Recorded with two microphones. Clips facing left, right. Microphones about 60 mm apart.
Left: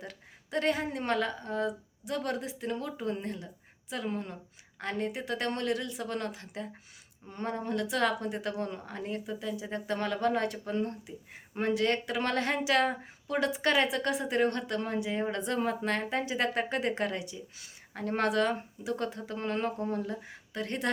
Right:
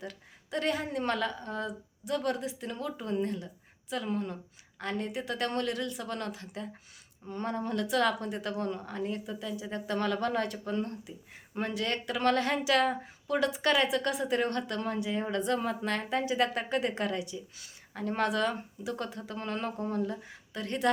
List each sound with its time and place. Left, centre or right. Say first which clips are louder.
0.0 s a woman's voice: right 2 dB; left